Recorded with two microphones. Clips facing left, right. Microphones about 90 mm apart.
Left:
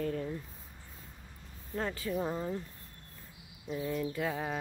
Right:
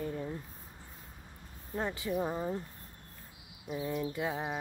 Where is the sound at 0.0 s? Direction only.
20° right (ahead or behind).